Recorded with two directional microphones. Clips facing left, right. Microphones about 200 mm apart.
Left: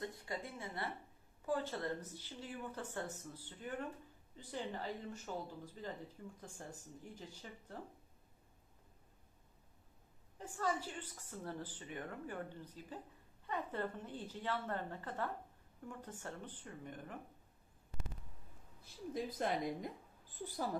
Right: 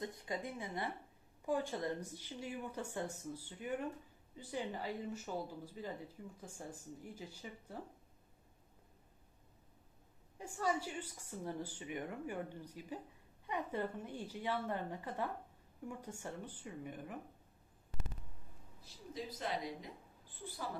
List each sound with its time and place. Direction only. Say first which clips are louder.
0.0 s a woman's voice: right 2 dB; 20° right (ahead or behind)
10.3 s a woman's voice: right 2 dB; 10° right (ahead or behind)
19.1 s speech: left 3 dB; 50° left (ahead or behind)